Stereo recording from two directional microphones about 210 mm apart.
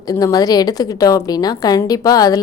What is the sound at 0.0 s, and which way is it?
A woman's voice, 15° left (ahead or behind).